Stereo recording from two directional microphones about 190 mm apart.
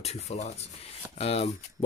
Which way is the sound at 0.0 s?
35° left (ahead or behind).